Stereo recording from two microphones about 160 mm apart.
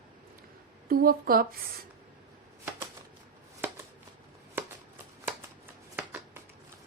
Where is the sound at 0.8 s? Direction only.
65° right (ahead or behind).